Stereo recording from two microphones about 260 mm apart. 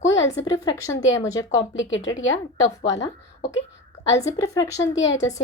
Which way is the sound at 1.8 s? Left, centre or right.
Left.